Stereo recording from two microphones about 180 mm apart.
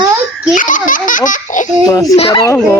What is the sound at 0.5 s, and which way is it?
Baby laughter, 45° left (ahead or behind).